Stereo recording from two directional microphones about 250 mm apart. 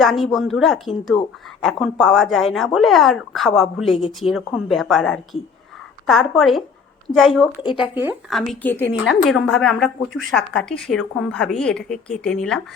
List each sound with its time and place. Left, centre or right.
0.0 s a woman's voice: centre
7.5 s speech: centre
7.8 s a woman's voice: centre